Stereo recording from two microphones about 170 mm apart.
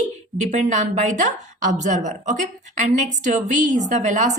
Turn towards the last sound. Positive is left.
turn(degrees=-45)  # may be behind; listen again after turning